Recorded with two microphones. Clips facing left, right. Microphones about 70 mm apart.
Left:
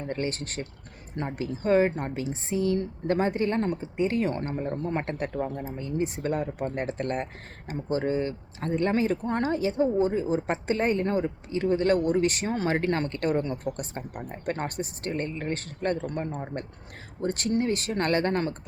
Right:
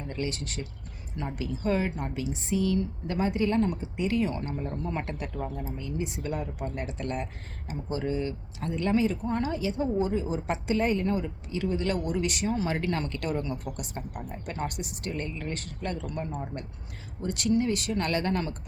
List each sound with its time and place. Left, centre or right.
0.1 s speech: left